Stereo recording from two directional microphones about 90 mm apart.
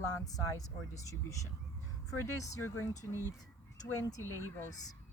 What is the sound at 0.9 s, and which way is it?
Speech, 35° left (ahead or behind).